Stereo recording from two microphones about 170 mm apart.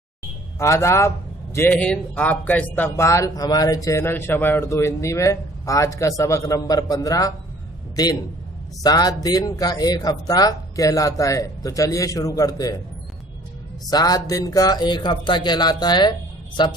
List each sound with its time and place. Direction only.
0.6 s a man's voice: 15° left (ahead or behind)
13.8 s speech: 20° left (ahead or behind)